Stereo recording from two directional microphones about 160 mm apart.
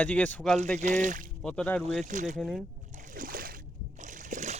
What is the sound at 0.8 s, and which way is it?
Speech, 50° right (ahead or behind).